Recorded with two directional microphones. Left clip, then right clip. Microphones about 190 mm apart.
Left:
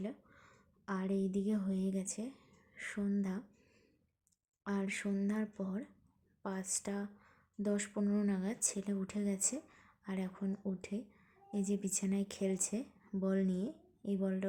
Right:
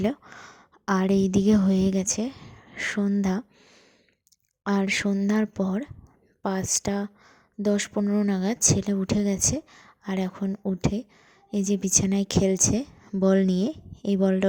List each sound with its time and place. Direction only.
0.0 s a woman's voice: 50° right (ahead or behind)
4.6 s a woman's voice: 45° right (ahead or behind)
8.3 s a woman's voice: 40° right (ahead or behind)